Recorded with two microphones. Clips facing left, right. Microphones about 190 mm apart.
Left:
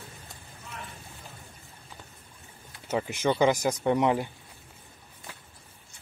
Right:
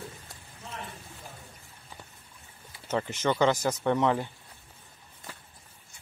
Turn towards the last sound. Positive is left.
turn(degrees=15)  # may be behind; listen again after turning